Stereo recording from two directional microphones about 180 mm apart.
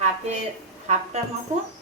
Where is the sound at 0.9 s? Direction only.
40° right (ahead or behind).